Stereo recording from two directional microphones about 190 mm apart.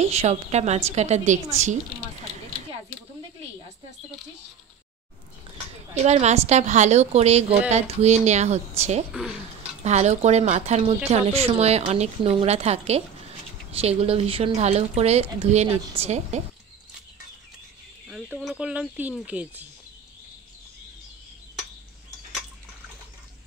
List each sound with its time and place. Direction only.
0.0 s speech: 35° right (ahead or behind)
6.0 s speech: 35° right (ahead or behind)
9.1 s speech: 5° right (ahead or behind)
9.6 s speech: 35° right (ahead or behind)
18.0 s speech: centre (ahead or behind)